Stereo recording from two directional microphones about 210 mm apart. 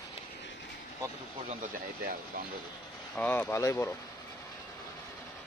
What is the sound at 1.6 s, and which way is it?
Speech, 40° right (ahead or behind).